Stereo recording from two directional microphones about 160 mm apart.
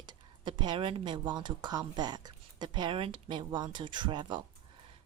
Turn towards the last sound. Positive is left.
turn(degrees=-30)  # may be behind; listen again after turning